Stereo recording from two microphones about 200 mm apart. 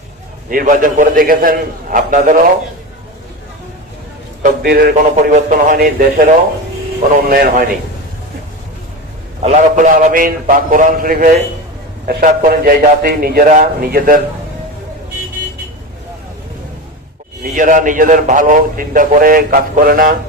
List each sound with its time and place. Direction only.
0.5 s a man's voice: 40° right (ahead or behind)
4.6 s a man's voice: 50° right (ahead or behind)
9.4 s a man's voice: 40° right (ahead or behind)
17.4 s a man's voice: 40° right (ahead or behind)